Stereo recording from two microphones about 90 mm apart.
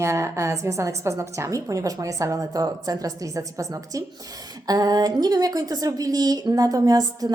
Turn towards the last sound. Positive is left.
turn(degrees=-45)  # may be behind; listen again after turning